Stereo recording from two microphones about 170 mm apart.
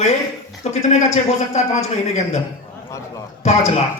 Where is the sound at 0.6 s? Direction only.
40° left (ahead or behind).